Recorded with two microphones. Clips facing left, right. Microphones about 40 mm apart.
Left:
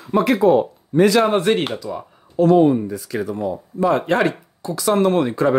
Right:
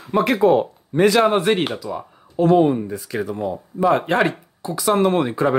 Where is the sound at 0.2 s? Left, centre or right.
Right.